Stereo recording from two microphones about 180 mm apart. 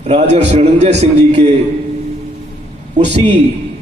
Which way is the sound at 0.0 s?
35° right (ahead or behind).